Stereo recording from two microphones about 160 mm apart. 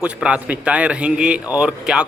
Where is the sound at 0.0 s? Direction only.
5° right (ahead or behind).